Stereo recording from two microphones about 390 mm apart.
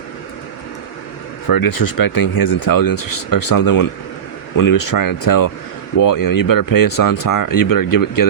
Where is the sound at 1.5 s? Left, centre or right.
Left.